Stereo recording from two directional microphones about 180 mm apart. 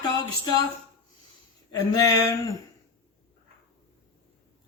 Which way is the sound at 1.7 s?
20° left (ahead or behind).